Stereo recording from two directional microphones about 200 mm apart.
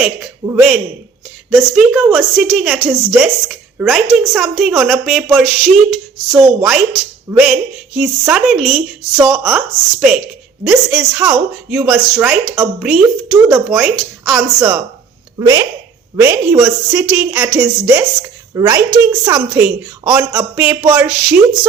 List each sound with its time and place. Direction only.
0.4 s a woman's voice: 5° right (ahead or behind)
15.4 s a woman's voice: 15° right (ahead or behind)